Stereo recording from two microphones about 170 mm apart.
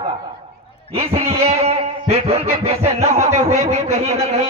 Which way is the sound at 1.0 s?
40° right (ahead or behind).